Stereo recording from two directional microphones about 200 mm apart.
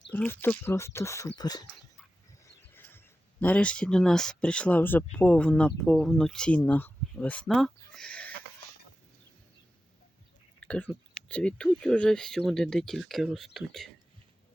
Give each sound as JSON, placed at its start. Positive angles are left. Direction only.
{"t": 0.1, "sound": "speech", "side_deg": 10}
{"t": 2.4, "sound": "a sound", "side_deg": 10}
{"t": 3.4, "sound": "speech", "side_deg": 5}
{"t": 10.6, "sound": "chewing", "side_deg": 5}
{"t": 11.3, "sound": "speech", "side_deg": 5}